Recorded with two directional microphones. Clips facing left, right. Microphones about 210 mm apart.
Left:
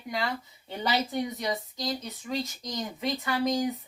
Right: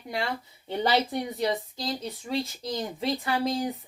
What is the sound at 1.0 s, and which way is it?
Speech, 30° right (ahead or behind).